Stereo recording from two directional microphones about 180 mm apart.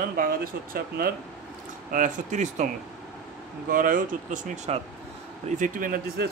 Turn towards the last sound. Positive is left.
turn(degrees=-50)  # may be behind; listen again after turning